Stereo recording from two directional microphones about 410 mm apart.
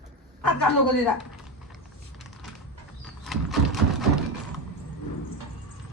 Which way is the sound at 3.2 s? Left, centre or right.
Centre.